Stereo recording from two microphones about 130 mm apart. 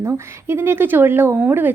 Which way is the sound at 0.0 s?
20° right (ahead or behind).